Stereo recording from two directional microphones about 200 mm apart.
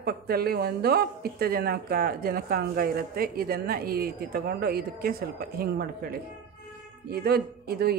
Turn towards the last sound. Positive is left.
turn(degrees=-50)  # may be behind; listen again after turning